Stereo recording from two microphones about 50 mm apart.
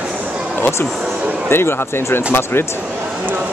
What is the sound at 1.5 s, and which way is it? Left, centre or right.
Speech, left.